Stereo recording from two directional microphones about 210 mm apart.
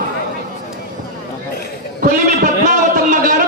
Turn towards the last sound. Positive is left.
turn(degrees=-40)  # may be behind; listen again after turning